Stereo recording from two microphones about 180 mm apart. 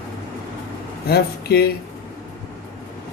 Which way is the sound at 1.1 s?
60° left (ahead or behind).